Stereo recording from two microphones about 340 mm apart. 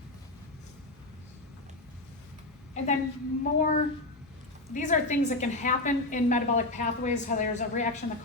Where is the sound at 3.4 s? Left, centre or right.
Left.